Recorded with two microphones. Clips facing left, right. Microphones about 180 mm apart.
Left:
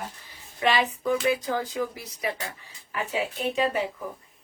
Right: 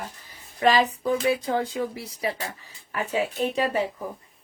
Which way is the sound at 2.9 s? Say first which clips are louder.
Right 3 dB; 45° right (ahead or behind).